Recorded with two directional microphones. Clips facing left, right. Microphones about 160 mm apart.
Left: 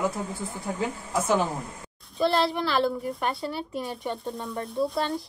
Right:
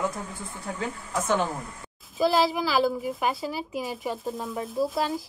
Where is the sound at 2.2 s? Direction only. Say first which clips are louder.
Right 1 dB; 5° right (ahead or behind).